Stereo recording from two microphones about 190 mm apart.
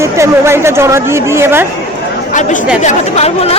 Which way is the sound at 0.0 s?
15° right (ahead or behind).